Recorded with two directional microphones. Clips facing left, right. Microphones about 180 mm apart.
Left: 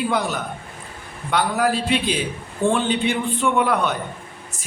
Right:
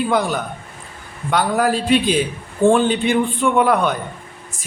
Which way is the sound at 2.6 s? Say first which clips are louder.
Right 6 dB; 45° right (ahead or behind).